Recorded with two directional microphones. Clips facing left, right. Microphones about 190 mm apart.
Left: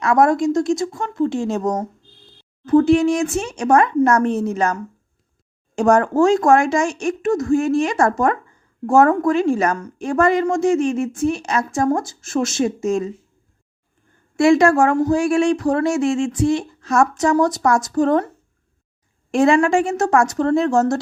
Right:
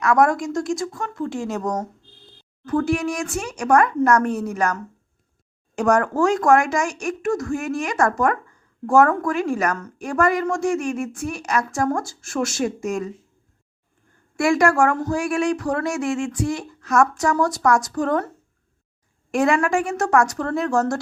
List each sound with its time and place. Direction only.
0.0 s a woman's voice: 25° left (ahead or behind)
14.3 s a woman's voice: 25° left (ahead or behind)
19.3 s a woman's voice: 25° left (ahead or behind)